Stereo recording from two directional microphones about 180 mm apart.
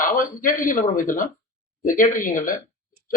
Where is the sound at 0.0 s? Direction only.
50° left (ahead or behind).